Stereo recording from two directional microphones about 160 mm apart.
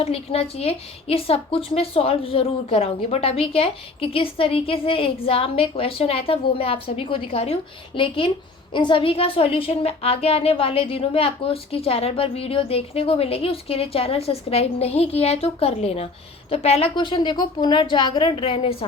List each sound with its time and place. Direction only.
0.0 s a woman's voice: 40° left (ahead or behind)